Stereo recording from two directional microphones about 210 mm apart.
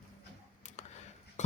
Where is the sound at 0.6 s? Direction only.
35° left (ahead or behind).